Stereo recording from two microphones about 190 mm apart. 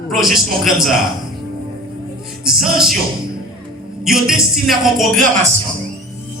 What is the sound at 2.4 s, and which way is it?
Music, centre (ahead or behind).